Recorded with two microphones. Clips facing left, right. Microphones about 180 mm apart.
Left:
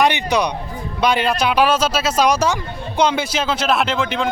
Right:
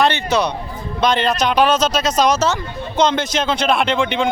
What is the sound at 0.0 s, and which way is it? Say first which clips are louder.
A man's voice: even; 15° left (ahead or behind).